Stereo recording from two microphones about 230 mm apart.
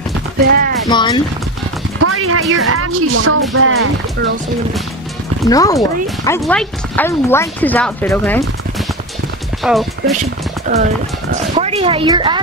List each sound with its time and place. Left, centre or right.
0.5 s speech: right
0.8 s speech: centre
2.0 s a sound: right
2.5 s speech: right
5.5 s speech: centre
6.4 s speech: centre
9.6 s speech: centre
10.7 s a woman's voice: right